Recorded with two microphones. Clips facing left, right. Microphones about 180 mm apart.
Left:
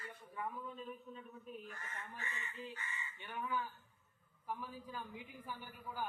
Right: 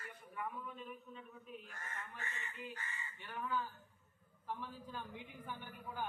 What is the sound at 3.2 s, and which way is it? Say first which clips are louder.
A man's voice: even; 20° left (ahead or behind).